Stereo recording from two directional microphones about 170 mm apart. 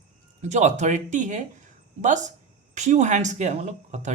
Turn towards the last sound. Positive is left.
turn(degrees=-45)  # may be behind; listen again after turning